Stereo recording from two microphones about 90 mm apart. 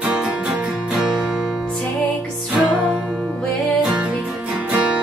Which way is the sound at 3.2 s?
5° left (ahead or behind).